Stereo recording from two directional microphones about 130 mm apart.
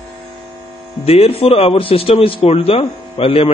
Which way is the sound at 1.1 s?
50° left (ahead or behind).